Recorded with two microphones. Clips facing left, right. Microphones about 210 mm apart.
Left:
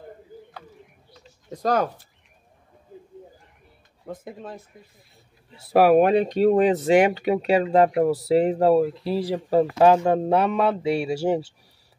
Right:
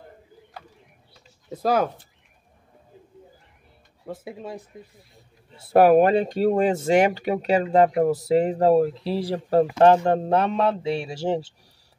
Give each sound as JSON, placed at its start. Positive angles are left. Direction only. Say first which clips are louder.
{"t": 1.5, "sound": "speech", "louder": "right 1 dB", "side_deg": -5}
{"t": 4.0, "sound": "speech", "louder": "right 1 dB", "side_deg": -5}